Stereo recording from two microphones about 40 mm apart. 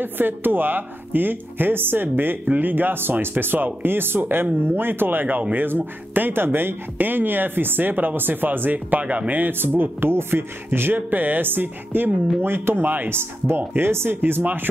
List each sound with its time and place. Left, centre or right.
0.0 s speech: right
9.0 s speech: right
9.3 s speech: right
12.4 s speech: right
13.1 s speech: right
14.4 s speech: right